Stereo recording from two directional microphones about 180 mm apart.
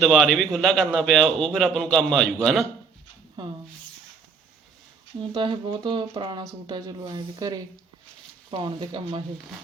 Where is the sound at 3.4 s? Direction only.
25° right (ahead or behind).